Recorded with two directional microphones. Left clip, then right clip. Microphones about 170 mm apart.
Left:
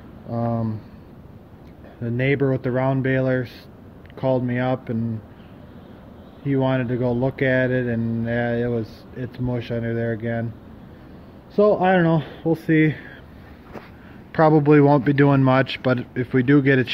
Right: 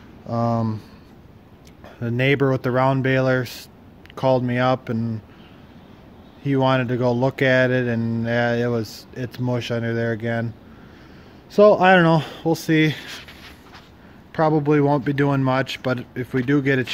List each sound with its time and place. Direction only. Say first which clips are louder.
0.3 s speech: right 3 dB; 55° right (ahead or behind)
2.0 s speech: right 2 dB; 45° right (ahead or behind)
6.4 s speech: right 3 dB; 45° right (ahead or behind)
11.5 s speech: right 4 dB; 55° right (ahead or behind); by 13.0 s 30° right (ahead or behind)
14.3 s speech: left 3 dB; 10° right (ahead or behind)